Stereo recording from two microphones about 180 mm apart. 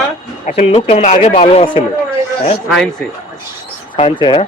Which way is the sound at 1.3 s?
30° left (ahead or behind).